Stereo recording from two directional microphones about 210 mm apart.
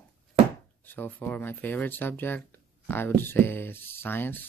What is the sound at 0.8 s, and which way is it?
Speech, 10° left (ahead or behind).